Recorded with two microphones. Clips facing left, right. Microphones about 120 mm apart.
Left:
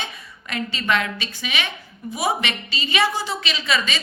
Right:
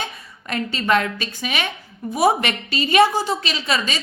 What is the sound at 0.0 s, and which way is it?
A woman's voice, 40° right (ahead or behind).